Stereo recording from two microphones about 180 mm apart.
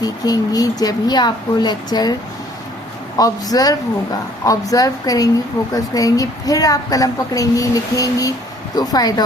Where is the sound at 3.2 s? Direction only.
20° left (ahead or behind).